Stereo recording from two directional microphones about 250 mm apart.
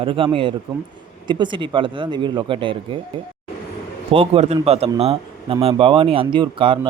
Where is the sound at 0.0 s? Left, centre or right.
Right.